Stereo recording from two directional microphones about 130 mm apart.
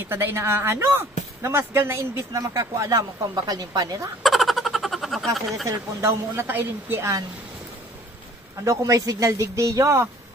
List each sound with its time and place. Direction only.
0.1 s speech: 20° right (ahead or behind)
4.2 s a sound: centre (ahead or behind)
5.7 s speech: 20° right (ahead or behind)
8.6 s speech: 25° right (ahead or behind)